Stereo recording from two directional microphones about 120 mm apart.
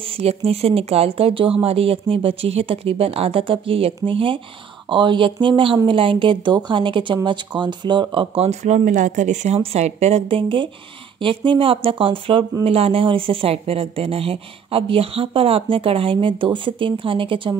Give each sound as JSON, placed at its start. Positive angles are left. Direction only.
{"t": 0.0, "sound": "speech", "side_deg": -55}
{"t": 8.5, "sound": "speech", "side_deg": -70}